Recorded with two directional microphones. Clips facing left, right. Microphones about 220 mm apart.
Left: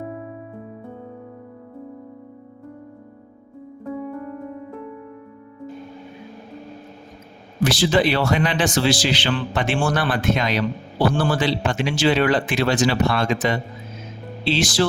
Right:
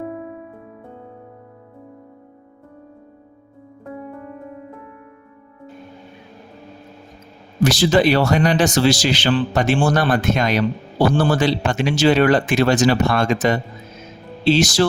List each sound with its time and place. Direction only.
7.6 s speech: 45° right (ahead or behind)